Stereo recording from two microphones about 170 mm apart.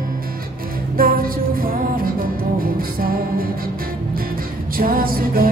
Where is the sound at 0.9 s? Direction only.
60° right (ahead or behind).